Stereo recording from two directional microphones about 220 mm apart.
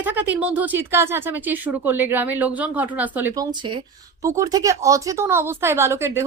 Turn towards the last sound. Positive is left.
turn(degrees=-10)  # may be behind; listen again after turning